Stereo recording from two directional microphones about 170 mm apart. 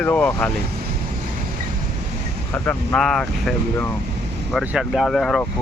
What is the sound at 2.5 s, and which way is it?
Speech, 5° left (ahead or behind).